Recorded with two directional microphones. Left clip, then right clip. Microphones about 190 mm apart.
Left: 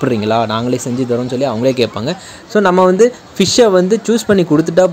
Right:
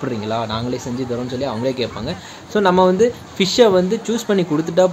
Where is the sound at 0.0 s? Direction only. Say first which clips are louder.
Left 8 dB; 45° left (ahead or behind).